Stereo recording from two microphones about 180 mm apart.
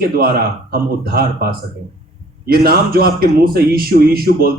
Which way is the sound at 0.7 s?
55° right (ahead or behind).